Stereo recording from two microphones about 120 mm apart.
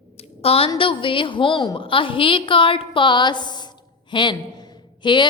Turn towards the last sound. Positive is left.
turn(degrees=40)  # may be behind; listen again after turning